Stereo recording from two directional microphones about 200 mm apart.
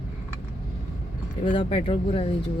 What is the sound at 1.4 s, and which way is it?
Speech, 25° left (ahead or behind).